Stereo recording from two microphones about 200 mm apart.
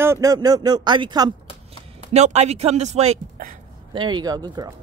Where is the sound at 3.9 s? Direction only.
25° right (ahead or behind).